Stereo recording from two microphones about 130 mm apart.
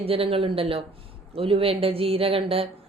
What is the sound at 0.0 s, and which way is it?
A woman's voice, 45° right (ahead or behind).